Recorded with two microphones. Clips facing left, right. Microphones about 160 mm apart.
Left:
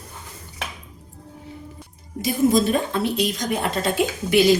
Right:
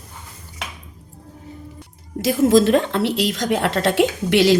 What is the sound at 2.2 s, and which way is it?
A woman's voice, 90° right.